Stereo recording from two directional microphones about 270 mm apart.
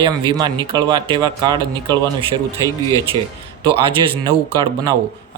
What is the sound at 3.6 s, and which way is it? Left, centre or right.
Speech, centre.